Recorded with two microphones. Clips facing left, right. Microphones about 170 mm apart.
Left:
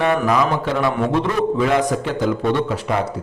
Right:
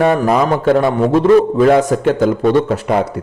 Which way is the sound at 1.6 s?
50° right (ahead or behind).